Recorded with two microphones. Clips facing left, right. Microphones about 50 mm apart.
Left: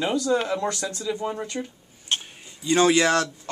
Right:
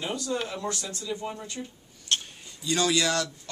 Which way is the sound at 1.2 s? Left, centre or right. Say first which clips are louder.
Left 7 dB; left.